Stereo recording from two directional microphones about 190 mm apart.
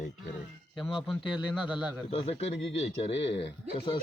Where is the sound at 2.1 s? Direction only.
30° left (ahead or behind).